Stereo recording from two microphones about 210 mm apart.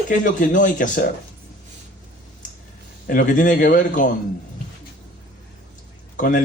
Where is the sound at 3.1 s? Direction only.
40° left (ahead or behind).